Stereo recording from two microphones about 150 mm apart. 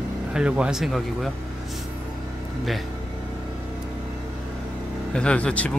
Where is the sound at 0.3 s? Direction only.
5° right (ahead or behind).